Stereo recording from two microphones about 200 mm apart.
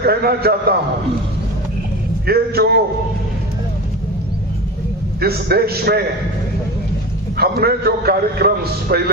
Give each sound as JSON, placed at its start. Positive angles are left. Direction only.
{"t": 0.0, "sound": "a man's voice", "side_deg": -50}
{"t": 2.2, "sound": "a man's voice", "side_deg": -50}
{"t": 5.2, "sound": "a man's voice", "side_deg": -50}
{"t": 7.3, "sound": "a man's voice", "side_deg": -50}